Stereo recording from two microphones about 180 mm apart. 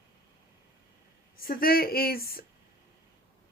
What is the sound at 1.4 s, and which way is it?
Speech, 55° left (ahead or behind).